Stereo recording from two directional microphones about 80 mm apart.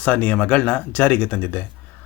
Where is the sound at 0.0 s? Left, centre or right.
Centre.